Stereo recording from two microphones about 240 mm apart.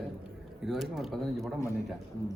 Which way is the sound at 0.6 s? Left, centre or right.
Centre.